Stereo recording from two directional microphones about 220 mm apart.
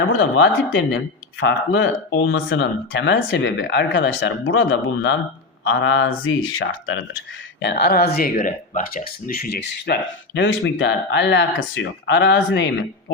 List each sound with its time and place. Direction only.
0.1 s speech: 60° left (ahead or behind)
5.6 s speech: 60° left (ahead or behind)
7.6 s speech: 50° left (ahead or behind)